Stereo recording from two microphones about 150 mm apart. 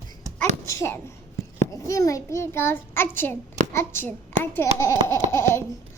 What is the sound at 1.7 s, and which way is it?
A child's voice, 20° left (ahead or behind).